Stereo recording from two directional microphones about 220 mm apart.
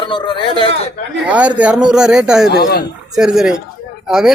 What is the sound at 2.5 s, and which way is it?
Speech, 45° left (ahead or behind).